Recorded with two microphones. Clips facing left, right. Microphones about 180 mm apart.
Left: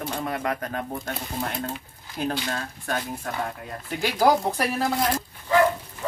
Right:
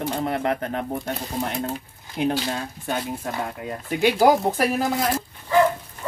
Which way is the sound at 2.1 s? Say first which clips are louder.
Right 4 dB; 20° right (ahead or behind).